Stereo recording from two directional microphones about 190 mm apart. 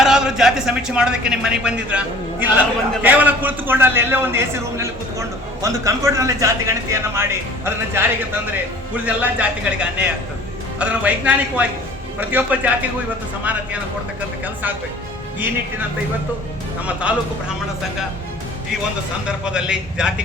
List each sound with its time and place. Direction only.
0.0 s a man's voice: 5° right (ahead or behind)
9.0 s a man's voice: 5° right (ahead or behind)
14.4 s a man's voice: 10° right (ahead or behind)
16.8 s a man's voice: 5° right (ahead or behind)
19.5 s speech: 5° right (ahead or behind)